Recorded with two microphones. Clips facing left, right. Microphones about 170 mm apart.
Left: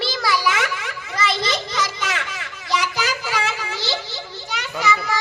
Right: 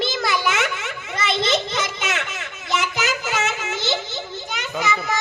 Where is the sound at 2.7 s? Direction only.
20° right (ahead or behind).